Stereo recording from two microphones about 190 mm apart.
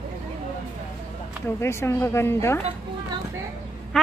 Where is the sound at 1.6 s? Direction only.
15° left (ahead or behind).